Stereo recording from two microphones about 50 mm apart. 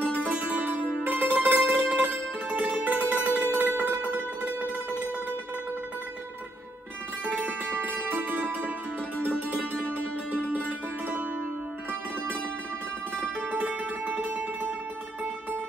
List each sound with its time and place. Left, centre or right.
0.0 s music: left
0.5 s music: right
7.4 s music: right
9.2 s music: left
13.7 s music: right